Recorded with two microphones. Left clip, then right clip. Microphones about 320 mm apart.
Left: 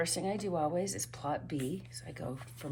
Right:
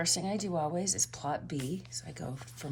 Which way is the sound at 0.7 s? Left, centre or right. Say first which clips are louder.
Right 2 dB; centre.